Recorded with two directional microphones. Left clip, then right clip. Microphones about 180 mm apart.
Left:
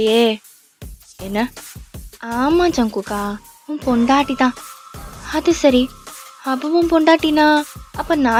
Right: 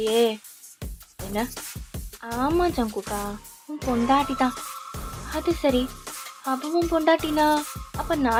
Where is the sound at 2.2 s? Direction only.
45° left (ahead or behind).